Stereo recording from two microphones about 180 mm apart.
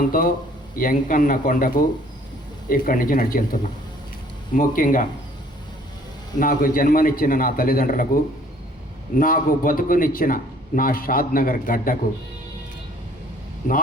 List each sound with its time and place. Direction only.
0.1 s a man's voice: 50° left (ahead or behind)
6.4 s a man's voice: 50° left (ahead or behind)